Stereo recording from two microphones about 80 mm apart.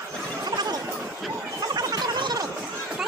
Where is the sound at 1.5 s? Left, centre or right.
Right.